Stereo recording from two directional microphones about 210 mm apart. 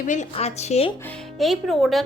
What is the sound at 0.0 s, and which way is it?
Speech, 35° left (ahead or behind).